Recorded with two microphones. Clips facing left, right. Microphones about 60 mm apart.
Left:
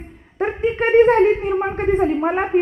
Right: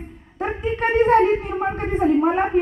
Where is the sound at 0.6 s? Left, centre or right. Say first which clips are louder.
Left 5 dB; left.